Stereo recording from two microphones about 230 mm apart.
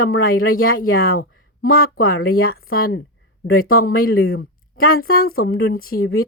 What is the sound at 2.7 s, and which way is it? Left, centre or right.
Speech, left.